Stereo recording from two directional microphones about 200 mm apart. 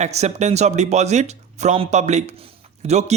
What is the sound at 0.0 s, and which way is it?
Speech, 35° right (ahead or behind).